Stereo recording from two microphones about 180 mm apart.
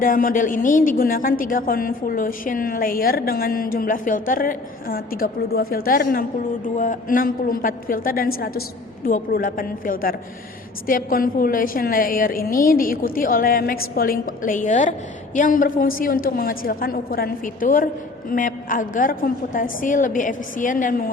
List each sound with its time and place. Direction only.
0.0 s a woman's voice: 50° left (ahead or behind)